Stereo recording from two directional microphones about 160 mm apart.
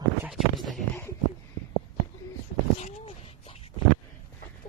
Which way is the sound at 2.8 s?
45° left (ahead or behind).